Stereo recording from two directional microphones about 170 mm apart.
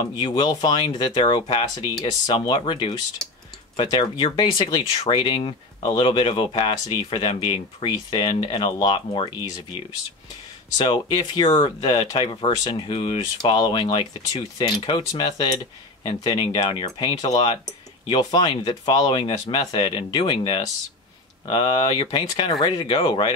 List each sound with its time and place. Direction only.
0.0 s speech: 25° left (ahead or behind)
10.8 s speech: 25° left (ahead or behind)